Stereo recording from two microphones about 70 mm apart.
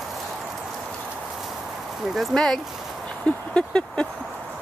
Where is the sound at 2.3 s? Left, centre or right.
Centre.